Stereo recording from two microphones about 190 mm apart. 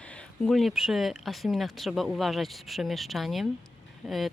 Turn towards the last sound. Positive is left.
turn(degrees=0)  # may be behind; listen again after turning